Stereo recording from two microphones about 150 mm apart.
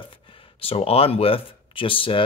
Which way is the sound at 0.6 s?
40° left (ahead or behind).